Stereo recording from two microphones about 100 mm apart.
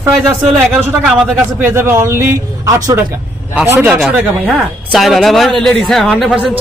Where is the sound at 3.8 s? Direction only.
10° right (ahead or behind).